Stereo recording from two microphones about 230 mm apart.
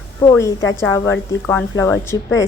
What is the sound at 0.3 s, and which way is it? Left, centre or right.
A woman's voice, centre.